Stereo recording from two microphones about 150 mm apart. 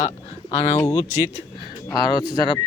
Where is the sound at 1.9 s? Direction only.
25° left (ahead or behind).